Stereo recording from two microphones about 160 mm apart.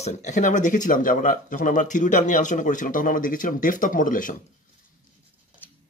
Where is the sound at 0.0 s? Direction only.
45° left (ahead or behind).